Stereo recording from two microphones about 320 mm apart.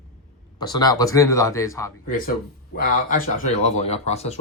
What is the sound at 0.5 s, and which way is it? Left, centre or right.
Speech, centre.